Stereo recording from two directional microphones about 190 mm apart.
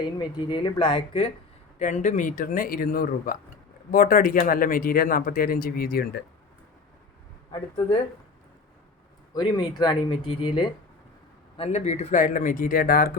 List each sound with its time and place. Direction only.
0.0 s speech: 25° left (ahead or behind)
1.8 s speech: 40° left (ahead or behind)
9.3 s speech: 20° left (ahead or behind); by 13.1 s 50° left (ahead or behind)